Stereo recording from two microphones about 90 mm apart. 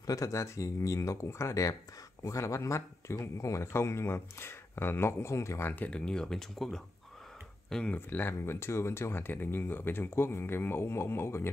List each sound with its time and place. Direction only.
0.0 s speech: 40° left (ahead or behind)
5.7 s speech: 15° left (ahead or behind)
7.7 s speech: 15° left (ahead or behind)